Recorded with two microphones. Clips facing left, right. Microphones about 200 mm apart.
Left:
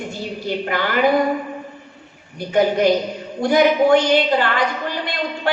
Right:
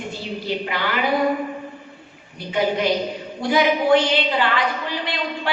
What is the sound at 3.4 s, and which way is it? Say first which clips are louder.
A woman's voice: left 4 dB; 45° left (ahead or behind).